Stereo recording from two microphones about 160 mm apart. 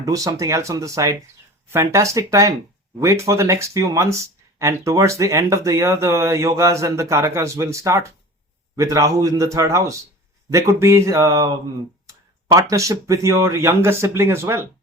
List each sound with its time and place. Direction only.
0.0 s speech: 20° right (ahead or behind)
12.7 s speech: 20° right (ahead or behind)